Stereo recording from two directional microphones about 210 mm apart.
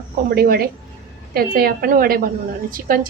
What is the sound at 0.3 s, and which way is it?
A woman's voice, 45° right (ahead or behind).